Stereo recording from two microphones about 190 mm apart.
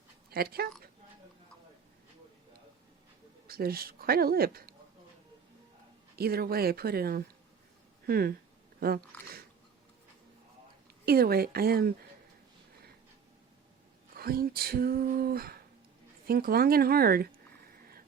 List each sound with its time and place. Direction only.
0.3 s speech: 55° right (ahead or behind)
3.4 s speech: 50° right (ahead or behind)
6.1 s speech: 55° right (ahead or behind)
11.0 s speech: 55° right (ahead or behind)
14.2 s speech: 50° right (ahead or behind)